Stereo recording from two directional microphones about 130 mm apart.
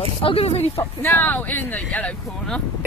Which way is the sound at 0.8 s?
15° left (ahead or behind).